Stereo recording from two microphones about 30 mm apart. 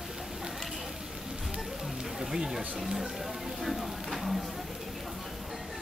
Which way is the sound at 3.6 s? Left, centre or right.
Centre.